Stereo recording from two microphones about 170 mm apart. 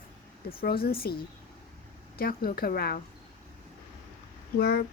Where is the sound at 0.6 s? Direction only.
65° left (ahead or behind).